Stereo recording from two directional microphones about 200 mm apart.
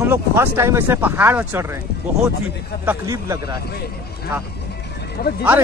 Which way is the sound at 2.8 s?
15° right (ahead or behind).